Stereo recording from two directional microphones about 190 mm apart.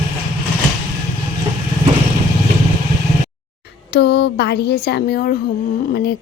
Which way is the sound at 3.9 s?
65° left (ahead or behind).